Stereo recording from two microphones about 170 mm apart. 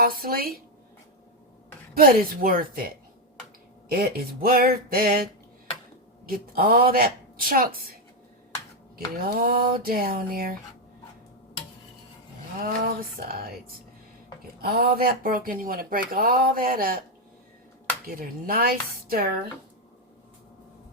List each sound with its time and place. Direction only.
0.0 s speech: 60° right (ahead or behind)
2.0 s speech: 60° right (ahead or behind)
9.2 s speech: 60° right (ahead or behind)
12.5 s speech: 60° right (ahead or behind)
14.6 s speech: 65° right (ahead or behind)
18.0 s speech: 60° right (ahead or behind)